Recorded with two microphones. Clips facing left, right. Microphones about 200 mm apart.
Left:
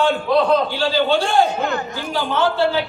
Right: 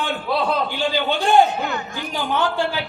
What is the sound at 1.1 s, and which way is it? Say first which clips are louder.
Speech: right 4 dB; 15° right (ahead or behind).